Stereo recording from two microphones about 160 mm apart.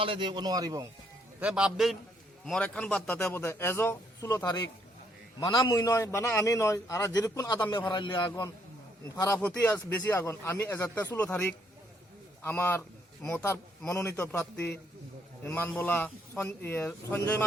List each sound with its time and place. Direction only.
0.0 s a man's voice: 30° right (ahead or behind)
1.4 s a man's voice: 5° right (ahead or behind); by 9.4 s 20° left (ahead or behind)
9.4 s a man's voice: 10° left (ahead or behind)